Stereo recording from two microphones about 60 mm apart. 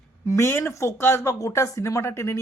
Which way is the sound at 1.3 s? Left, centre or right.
Left.